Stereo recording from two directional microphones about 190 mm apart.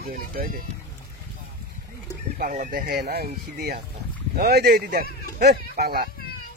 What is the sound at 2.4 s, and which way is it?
Speech, 45° right (ahead or behind).